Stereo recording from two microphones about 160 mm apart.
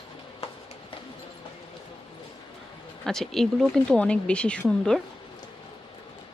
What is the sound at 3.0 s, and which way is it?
Speech, centre (ahead or behind).